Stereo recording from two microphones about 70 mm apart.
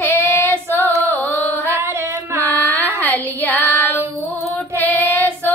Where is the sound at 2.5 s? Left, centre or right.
Left.